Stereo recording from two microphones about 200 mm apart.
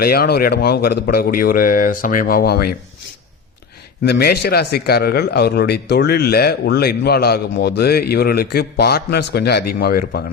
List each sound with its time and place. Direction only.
0.0 s a man's voice: 50° left (ahead or behind)
4.0 s a man's voice: 55° left (ahead or behind)